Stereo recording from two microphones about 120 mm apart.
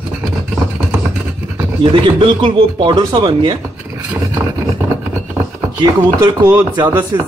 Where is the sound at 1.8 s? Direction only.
45° right (ahead or behind).